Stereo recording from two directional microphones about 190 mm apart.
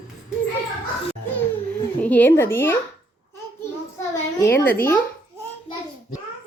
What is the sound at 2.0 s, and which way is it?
Speech, 10° left (ahead or behind).